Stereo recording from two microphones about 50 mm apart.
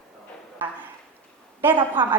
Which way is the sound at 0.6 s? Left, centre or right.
Right.